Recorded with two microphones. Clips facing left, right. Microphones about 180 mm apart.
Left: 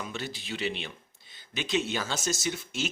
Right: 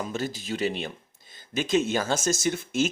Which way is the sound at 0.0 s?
40° right (ahead or behind).